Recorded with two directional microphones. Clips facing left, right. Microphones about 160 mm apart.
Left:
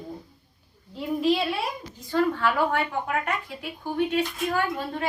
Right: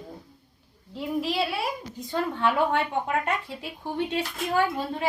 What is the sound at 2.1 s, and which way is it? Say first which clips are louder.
Speech: left 2 dB; 20° right (ahead or behind).